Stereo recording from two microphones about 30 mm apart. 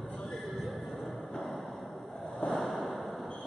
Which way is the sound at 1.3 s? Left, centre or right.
Centre.